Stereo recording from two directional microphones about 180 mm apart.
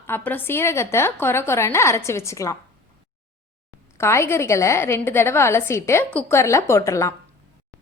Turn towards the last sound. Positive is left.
turn(degrees=15)  # may be behind; listen again after turning